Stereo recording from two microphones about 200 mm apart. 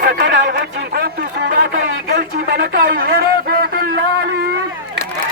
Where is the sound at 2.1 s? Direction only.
50° right (ahead or behind).